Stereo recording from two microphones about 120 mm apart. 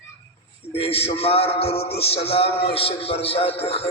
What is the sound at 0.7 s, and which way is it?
A man's voice, 55° left (ahead or behind).